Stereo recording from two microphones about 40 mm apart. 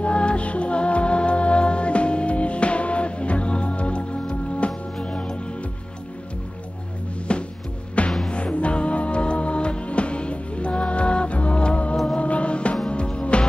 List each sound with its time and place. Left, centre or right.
0.0 s music: left
7.3 s music: left